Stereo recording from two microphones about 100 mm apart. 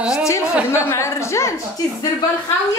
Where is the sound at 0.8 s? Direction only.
30° left (ahead or behind).